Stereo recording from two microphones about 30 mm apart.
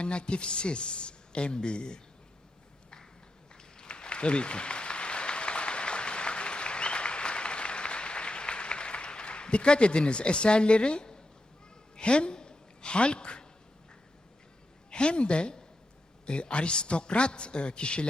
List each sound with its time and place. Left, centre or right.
0.0 s a woman's voice: left
3.8 s applause: left
11.9 s a woman's voice: left
14.8 s a woman's voice: left